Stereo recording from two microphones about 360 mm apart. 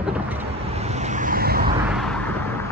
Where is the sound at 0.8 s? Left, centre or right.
Centre.